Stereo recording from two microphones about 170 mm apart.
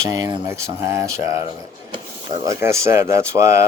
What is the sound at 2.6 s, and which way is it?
Speech, 15° right (ahead or behind).